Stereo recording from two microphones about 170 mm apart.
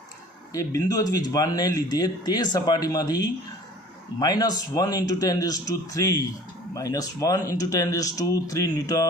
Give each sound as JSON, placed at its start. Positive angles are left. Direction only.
{"t": 0.5, "sound": "speech", "side_deg": 20}